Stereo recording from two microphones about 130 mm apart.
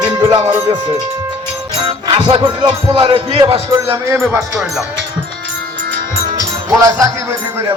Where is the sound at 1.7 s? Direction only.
45° right (ahead or behind).